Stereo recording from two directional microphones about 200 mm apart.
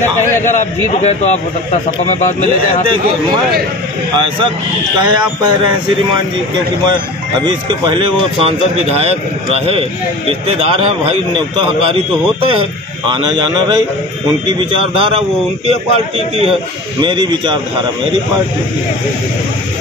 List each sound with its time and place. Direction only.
0.5 s a man's voice: 40° left (ahead or behind)
7.4 s speech: 25° right (ahead or behind)
14.7 s speech: 25° right (ahead or behind)
17.0 s speech: 25° right (ahead or behind)